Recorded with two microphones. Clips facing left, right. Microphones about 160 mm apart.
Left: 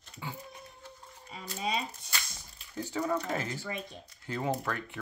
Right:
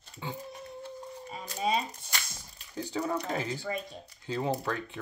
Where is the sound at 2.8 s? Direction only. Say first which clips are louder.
Even; 15° right (ahead or behind).